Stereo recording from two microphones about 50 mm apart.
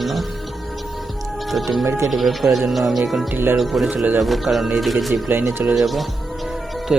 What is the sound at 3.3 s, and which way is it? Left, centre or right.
Speech, right.